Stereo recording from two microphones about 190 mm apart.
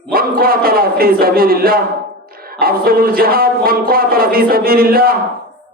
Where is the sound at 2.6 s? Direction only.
50° right (ahead or behind).